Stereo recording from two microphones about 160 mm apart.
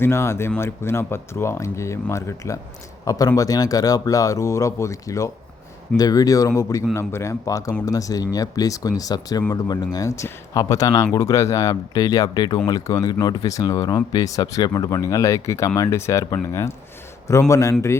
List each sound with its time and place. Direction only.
0.0 s speech: 15° left (ahead or behind)